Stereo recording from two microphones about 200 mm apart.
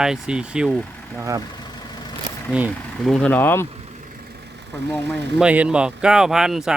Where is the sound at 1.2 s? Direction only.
15° right (ahead or behind).